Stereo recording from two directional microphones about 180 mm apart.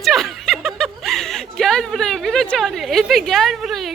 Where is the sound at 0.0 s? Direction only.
Centre (ahead or behind).